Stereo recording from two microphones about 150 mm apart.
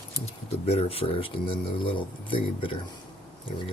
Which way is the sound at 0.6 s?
40° left (ahead or behind).